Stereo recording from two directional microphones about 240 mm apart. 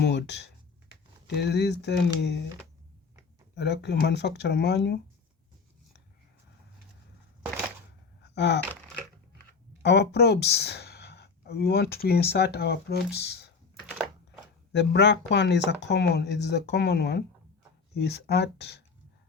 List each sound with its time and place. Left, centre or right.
0.0 s speech: left
3.5 s speech: left
8.2 s gasp: left
9.8 s speech: left
14.7 s speech: left